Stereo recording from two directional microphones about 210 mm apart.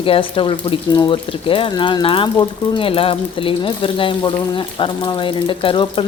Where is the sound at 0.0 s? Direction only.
25° left (ahead or behind).